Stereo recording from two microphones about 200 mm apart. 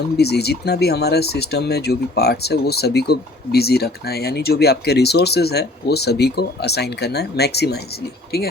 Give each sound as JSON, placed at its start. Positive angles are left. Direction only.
{"t": 0.2, "sound": "speech", "side_deg": 55}